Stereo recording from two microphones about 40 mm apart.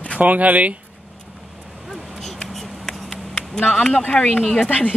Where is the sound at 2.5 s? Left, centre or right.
Centre.